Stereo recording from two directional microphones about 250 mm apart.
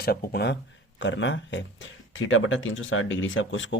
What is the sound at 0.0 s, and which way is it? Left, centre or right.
Speech, left.